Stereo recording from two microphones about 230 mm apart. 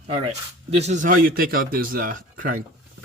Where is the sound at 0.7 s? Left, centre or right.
Right.